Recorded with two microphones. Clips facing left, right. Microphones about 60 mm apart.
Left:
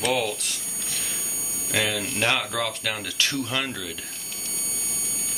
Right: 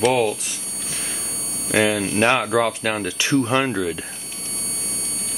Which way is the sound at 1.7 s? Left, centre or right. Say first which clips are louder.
Right 7 dB; right.